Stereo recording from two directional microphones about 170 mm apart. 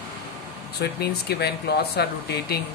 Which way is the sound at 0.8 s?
70° left (ahead or behind).